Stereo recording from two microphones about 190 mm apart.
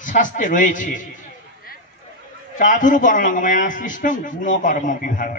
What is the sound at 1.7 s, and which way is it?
Hubbub, 50° left (ahead or behind).